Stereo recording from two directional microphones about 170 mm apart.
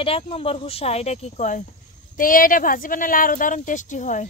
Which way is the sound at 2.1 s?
55° left (ahead or behind).